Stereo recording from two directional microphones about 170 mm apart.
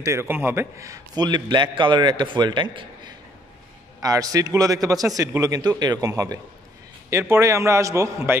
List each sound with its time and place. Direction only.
0.0 s a man's voice: 15° right (ahead or behind)
4.0 s a man's voice: 20° right (ahead or behind)